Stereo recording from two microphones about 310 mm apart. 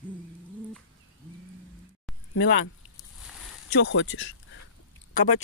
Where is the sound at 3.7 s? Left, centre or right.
Left.